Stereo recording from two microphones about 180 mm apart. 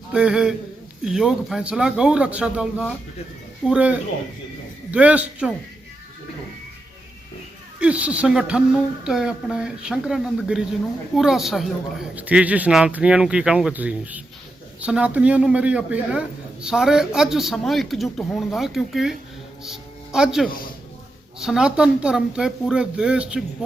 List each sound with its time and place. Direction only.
0.1 s a man's voice: 5° right (ahead or behind)
7.8 s a man's voice: 5° right (ahead or behind)